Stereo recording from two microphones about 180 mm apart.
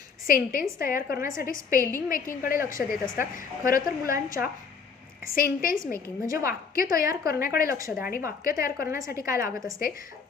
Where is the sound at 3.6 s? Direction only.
50° left (ahead or behind).